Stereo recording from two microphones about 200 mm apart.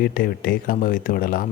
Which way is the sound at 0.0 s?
45° left (ahead or behind).